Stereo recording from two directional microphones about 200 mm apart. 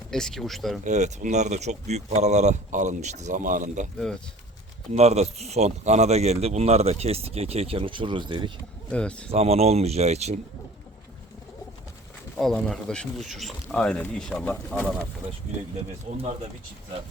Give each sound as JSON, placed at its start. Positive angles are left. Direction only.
{"t": 0.1, "sound": "speech", "side_deg": 5}
{"t": 0.9, "sound": "speech", "side_deg": -35}
{"t": 3.9, "sound": "speech", "side_deg": 5}
{"t": 4.9, "sound": "speech", "side_deg": -30}
{"t": 8.9, "sound": "speech", "side_deg": 5}
{"t": 9.3, "sound": "speech", "side_deg": -30}
{"t": 12.4, "sound": "speech", "side_deg": 0}
{"t": 16.1, "sound": "speech", "side_deg": -30}